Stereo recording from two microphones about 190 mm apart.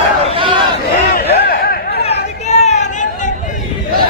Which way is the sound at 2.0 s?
35° left (ahead or behind).